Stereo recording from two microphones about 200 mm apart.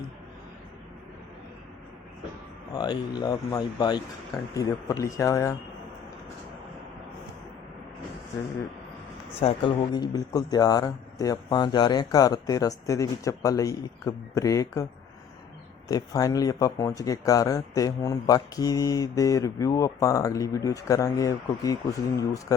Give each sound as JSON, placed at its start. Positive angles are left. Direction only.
{"t": 2.7, "sound": "a man's voice", "side_deg": 20}
{"t": 9.4, "sound": "a man's voice", "side_deg": 25}
{"t": 15.9, "sound": "speech", "side_deg": 20}